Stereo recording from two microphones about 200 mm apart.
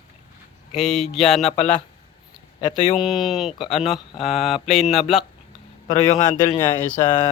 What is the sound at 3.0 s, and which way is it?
A man's voice, centre (ahead or behind).